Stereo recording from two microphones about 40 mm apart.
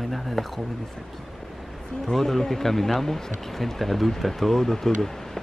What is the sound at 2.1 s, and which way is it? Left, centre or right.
Speech, centre.